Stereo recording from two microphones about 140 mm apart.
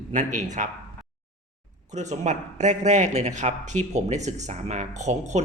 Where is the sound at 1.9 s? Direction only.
55° right (ahead or behind).